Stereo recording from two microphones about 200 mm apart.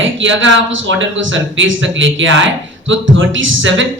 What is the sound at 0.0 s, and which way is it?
Speech, 70° right (ahead or behind).